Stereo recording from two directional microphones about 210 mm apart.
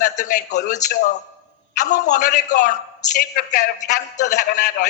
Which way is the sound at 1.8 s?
35° left (ahead or behind).